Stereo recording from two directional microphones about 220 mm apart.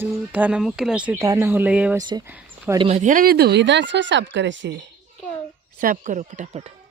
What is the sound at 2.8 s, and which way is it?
Speech, 30° right (ahead or behind).